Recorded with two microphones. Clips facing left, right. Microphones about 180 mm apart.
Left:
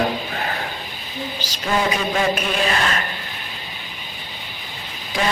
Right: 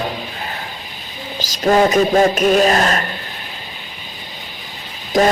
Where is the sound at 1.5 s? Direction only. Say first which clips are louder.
Right 9 dB; 45° right (ahead or behind).